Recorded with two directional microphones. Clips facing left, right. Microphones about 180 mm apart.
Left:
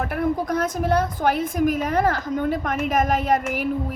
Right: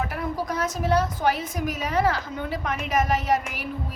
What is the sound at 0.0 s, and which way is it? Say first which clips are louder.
A woman's voice: left 5 dB; 55° left (ahead or behind).